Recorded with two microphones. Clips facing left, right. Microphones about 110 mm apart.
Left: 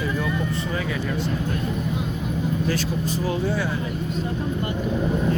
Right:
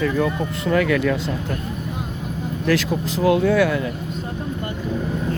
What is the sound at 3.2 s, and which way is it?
Speech, 65° right (ahead or behind).